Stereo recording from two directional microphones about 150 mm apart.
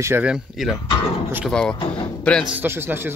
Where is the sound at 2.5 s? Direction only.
15° right (ahead or behind).